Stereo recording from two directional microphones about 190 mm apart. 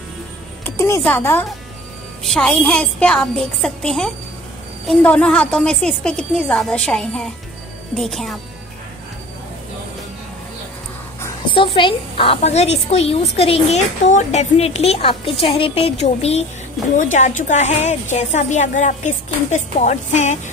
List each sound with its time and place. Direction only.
0.7 s a woman's voice: 15° left (ahead or behind)
11.5 s a woman's voice: 25° left (ahead or behind)